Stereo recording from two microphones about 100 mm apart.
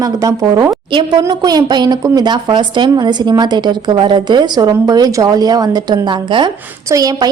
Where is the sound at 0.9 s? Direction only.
50° right (ahead or behind).